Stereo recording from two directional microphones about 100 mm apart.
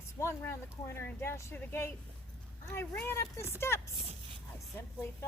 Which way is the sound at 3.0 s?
25° left (ahead or behind).